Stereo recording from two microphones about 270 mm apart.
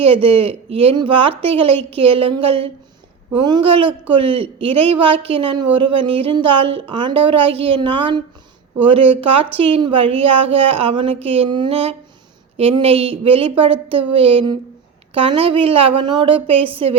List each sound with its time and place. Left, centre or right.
0.0 s speech: right